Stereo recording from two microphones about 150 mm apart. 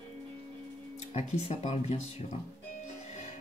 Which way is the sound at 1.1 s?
45° left (ahead or behind).